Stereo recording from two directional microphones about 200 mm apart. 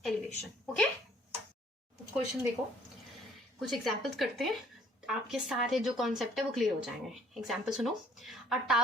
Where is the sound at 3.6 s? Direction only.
Centre (ahead or behind).